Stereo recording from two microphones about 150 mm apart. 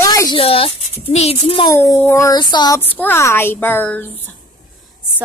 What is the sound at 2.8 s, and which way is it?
A woman's voice, 10° left (ahead or behind).